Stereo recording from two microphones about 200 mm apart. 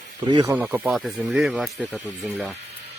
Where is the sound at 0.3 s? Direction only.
20° right (ahead or behind).